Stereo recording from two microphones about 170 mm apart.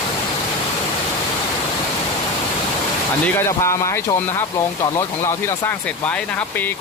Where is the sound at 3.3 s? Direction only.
15° left (ahead or behind).